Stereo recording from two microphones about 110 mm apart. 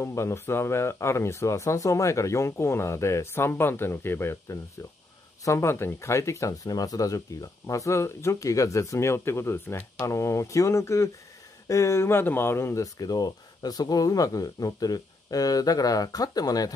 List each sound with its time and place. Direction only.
0.0 s speech: 25° left (ahead or behind)